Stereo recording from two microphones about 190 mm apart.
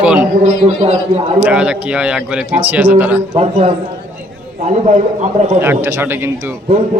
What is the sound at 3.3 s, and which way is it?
Speech, 35° right (ahead or behind).